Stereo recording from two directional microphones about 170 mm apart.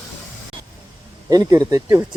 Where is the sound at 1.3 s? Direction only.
20° right (ahead or behind).